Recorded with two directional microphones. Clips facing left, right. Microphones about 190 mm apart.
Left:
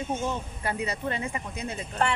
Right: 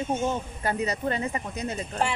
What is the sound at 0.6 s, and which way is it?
Speech, 40° right (ahead or behind).